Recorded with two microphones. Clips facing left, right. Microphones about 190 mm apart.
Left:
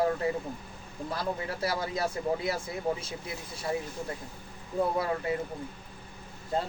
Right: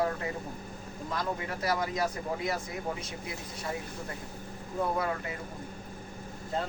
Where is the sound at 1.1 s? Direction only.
30° left (ahead or behind).